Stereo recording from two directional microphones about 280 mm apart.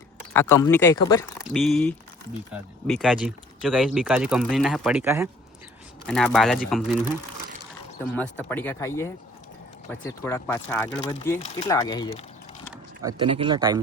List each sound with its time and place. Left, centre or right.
0.3 s speech: centre
1.5 s speech: centre
6.1 s speech: centre
8.1 s speech: centre
13.0 s speech: centre